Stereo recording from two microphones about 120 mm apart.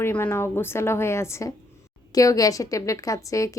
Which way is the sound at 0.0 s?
15° left (ahead or behind).